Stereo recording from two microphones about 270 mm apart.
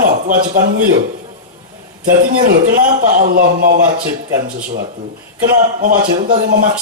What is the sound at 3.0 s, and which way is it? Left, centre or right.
Speech, right.